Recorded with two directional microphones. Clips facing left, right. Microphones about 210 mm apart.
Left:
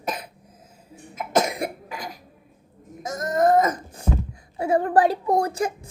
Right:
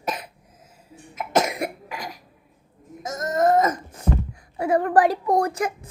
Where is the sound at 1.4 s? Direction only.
30° left (ahead or behind).